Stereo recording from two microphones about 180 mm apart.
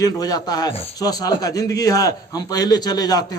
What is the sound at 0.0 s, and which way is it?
A man's voice, 20° left (ahead or behind).